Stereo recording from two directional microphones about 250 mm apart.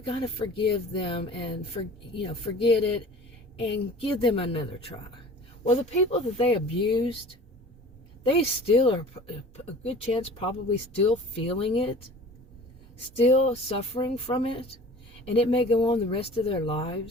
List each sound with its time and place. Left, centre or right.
0.0 s speech: centre
4.2 s speech: left
5.6 s speech: left
8.2 s speech: left
13.1 s speech: left